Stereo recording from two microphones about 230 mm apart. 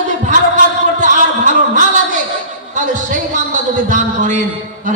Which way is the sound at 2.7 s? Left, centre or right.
Right.